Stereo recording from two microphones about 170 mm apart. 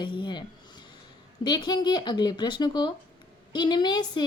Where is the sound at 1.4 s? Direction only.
25° left (ahead or behind).